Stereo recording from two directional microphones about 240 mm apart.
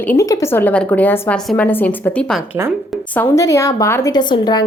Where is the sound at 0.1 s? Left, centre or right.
Centre.